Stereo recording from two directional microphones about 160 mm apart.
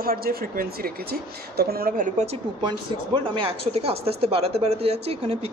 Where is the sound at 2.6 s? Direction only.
35° right (ahead or behind).